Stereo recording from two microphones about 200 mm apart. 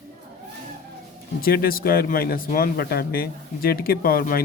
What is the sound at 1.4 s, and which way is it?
Speech, 50° left (ahead or behind).